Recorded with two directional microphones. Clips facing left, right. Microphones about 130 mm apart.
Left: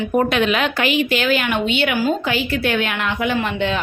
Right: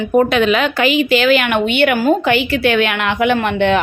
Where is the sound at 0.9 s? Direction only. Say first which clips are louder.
Right 7 dB; 90° right; by 3.7 s 65° right (ahead or behind).